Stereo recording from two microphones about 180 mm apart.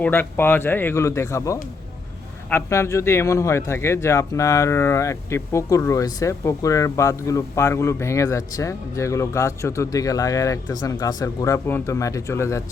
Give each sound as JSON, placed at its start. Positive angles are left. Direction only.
{"t": 0.0, "sound": "speech", "side_deg": 10}